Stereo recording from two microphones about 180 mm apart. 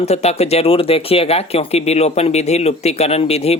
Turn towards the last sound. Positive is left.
turn(degrees=35)  # may be behind; listen again after turning